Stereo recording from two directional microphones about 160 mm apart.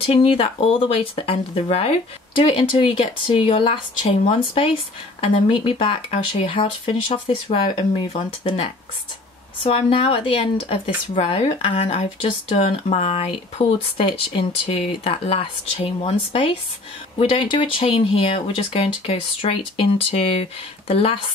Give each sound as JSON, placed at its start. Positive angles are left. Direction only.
{"t": 0.0, "sound": "speech", "side_deg": 35}